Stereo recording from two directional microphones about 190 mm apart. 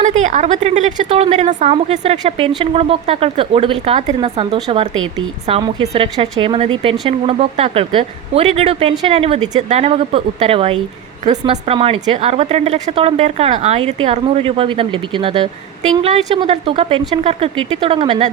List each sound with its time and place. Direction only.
0.2 s speech: 40° right (ahead or behind)
4.2 s a woman's voice: 25° right (ahead or behind)